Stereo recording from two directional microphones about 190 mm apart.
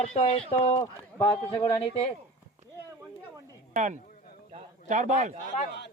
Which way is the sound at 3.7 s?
40° right (ahead or behind).